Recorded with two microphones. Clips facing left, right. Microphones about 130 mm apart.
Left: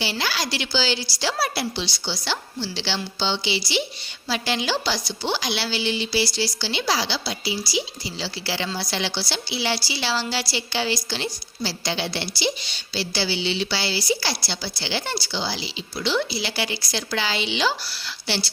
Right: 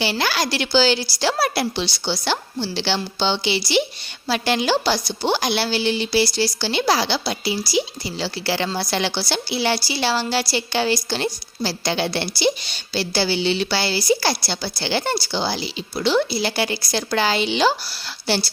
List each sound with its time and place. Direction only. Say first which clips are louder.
0.0 s a woman's voice: right 5 dB; 60° right (ahead or behind)